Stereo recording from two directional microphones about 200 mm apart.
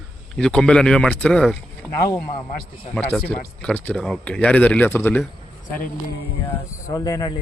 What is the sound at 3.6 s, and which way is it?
Speech, 5° left (ahead or behind).